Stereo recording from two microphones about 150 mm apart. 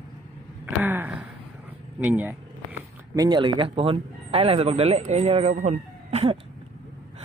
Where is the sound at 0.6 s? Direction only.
15° right (ahead or behind).